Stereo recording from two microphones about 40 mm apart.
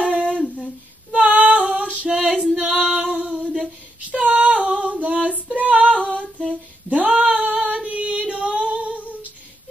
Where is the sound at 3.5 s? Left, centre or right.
Right.